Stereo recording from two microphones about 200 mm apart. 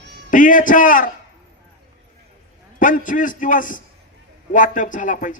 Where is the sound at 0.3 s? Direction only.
40° left (ahead or behind).